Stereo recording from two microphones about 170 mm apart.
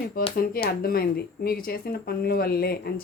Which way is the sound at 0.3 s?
60° left (ahead or behind).